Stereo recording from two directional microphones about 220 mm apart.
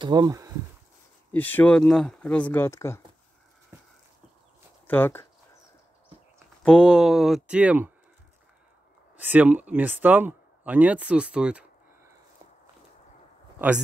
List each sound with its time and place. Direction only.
0.0 s speech: 20° right (ahead or behind)
1.3 s speech: 10° left (ahead or behind)
3.7 s a sound: 10° right (ahead or behind)
4.8 s speech: 10° left (ahead or behind)
6.6 s speech: 5° left (ahead or behind)
9.2 s speech: 10° right (ahead or behind)